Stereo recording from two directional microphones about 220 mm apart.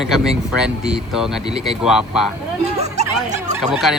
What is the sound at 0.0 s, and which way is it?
Speech, centre (ahead or behind).